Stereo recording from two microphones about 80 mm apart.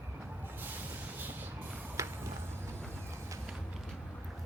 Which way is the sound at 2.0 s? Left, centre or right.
Right.